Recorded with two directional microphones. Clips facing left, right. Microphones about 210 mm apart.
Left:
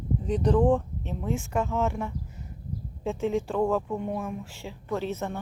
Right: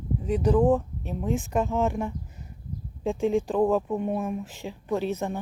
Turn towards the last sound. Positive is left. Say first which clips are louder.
# right 3 dB
turn(degrees=-15)  # may be behind; listen again after turning